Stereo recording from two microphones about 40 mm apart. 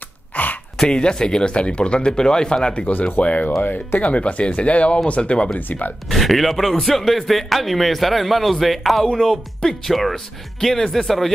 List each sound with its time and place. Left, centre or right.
0.3 s a sound: left
0.8 s speech: left
2.9 s speech: left
3.2 s speech: left
3.4 s speech: left
4.0 s speech: left
5.6 s speech: left
6.0 s a man's voice: centre
9.0 s speech: centre